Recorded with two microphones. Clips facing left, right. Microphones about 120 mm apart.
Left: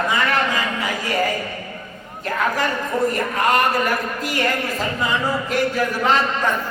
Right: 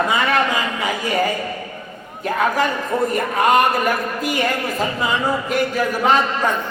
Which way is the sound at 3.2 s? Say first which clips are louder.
Right 3 dB; 20° right (ahead or behind).